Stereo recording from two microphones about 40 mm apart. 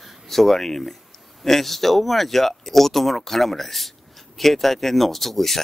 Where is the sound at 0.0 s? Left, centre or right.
Centre.